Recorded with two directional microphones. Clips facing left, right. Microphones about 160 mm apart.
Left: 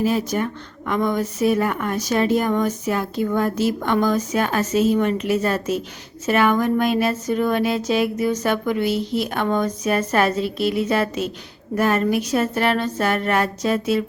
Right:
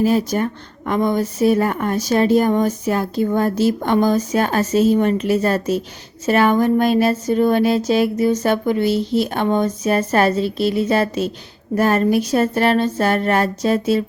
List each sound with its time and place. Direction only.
0.0 s speech: 35° right (ahead or behind)